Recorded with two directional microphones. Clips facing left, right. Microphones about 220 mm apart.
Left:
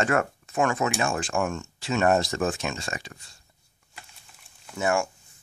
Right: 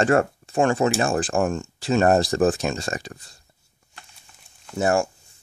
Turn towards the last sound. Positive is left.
turn(degrees=-35)  # may be behind; listen again after turning